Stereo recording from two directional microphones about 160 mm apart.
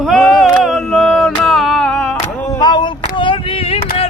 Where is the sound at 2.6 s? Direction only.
25° left (ahead or behind).